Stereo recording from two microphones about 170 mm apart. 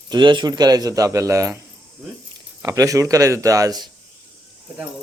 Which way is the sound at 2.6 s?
20° right (ahead or behind).